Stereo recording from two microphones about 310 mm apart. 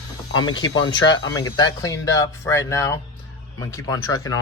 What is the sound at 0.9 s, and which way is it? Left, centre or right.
Speech, centre.